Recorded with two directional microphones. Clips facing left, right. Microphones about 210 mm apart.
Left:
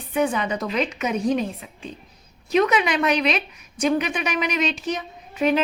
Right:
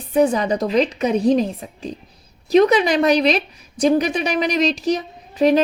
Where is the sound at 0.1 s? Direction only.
35° right (ahead or behind).